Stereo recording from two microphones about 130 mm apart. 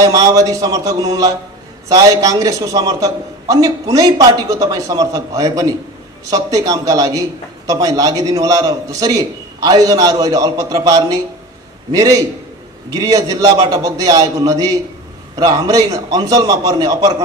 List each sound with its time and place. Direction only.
0.0 s a man's voice: 25° right (ahead or behind)